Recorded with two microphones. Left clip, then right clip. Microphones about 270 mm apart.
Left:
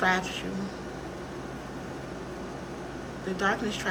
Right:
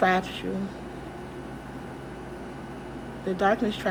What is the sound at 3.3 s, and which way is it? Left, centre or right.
Speech, centre.